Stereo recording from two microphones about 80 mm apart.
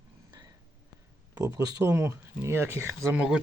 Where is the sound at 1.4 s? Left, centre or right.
Right.